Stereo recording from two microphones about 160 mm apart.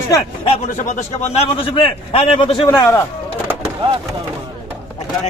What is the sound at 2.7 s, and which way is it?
Speech, 20° left (ahead or behind).